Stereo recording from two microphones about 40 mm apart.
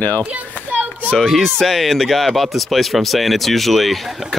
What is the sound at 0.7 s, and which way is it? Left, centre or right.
Children playing, right.